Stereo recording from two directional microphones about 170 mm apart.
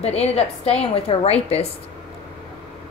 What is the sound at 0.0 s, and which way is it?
A woman's voice, 35° left (ahead or behind).